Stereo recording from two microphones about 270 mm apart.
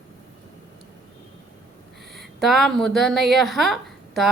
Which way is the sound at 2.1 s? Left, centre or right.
Centre.